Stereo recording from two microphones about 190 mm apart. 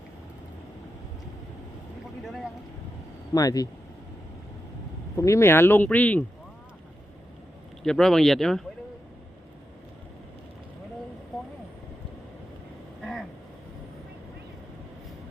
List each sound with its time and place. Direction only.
2.2 s boat: centre (ahead or behind)
3.3 s speech: 20° left (ahead or behind)
5.1 s speech: 15° left (ahead or behind)
7.9 s speech: 5° left (ahead or behind)
13.0 s vehicle: centre (ahead or behind)